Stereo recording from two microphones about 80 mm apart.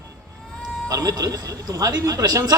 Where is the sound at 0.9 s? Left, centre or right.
Right.